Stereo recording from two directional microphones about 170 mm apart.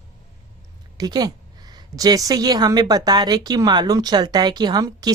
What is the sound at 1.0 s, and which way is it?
A woman's voice, 25° right (ahead or behind).